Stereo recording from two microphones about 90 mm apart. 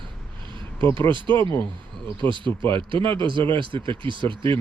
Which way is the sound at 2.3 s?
65° right (ahead or behind).